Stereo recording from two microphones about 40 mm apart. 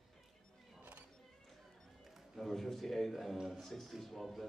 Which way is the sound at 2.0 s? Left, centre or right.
Centre.